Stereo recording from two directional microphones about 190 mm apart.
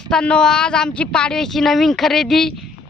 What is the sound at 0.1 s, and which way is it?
Speech, 5° left (ahead or behind).